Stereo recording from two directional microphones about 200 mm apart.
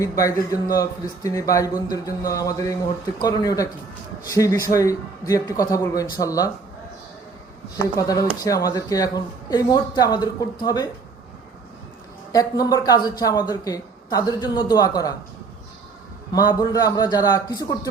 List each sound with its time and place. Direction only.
0.0 s a man's voice: 15° left (ahead or behind)
7.9 s speech: 15° left (ahead or behind)
12.3 s speech: 20° left (ahead or behind)
16.3 s speech: 20° left (ahead or behind)